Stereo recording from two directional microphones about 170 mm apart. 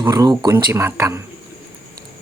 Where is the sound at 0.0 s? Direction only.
25° right (ahead or behind).